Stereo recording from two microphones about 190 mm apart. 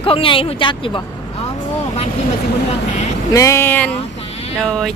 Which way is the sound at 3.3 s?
15° left (ahead or behind).